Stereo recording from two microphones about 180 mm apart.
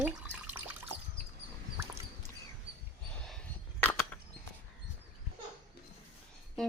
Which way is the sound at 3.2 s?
5° left (ahead or behind).